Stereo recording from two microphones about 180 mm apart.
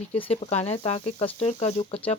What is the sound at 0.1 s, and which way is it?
Speech, 35° left (ahead or behind).